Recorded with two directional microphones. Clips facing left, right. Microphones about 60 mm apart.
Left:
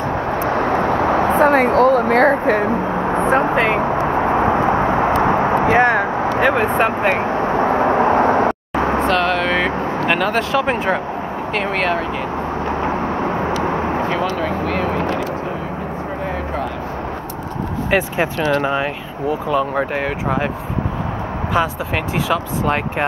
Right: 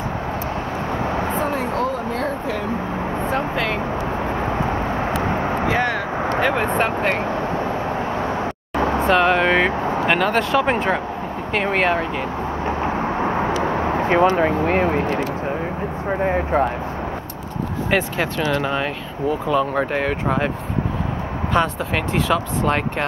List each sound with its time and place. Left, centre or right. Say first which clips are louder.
0.5 s vehicle: left 8 dB; left
3.2 s vehicle: left 8 dB; left
6.4 s speech: left 4 dB; centre
7.0 s speech: left 4 dB; centre
7.5 s vehicle: left 8 dB; left
9.0 s vehicle: right 1 dB; centre
10.0 s speech: left 1 dB; centre
14.0 s speech: right 4 dB; right
17.9 s speech: left 3 dB; left
19.5 s speech: left 1 dB; centre
21.5 s speech: left 1 dB; centre